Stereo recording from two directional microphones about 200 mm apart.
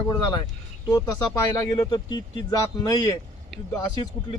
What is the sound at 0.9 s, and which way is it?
Speech, 20° left (ahead or behind).